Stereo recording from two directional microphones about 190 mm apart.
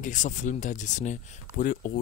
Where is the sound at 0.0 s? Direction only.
40° left (ahead or behind).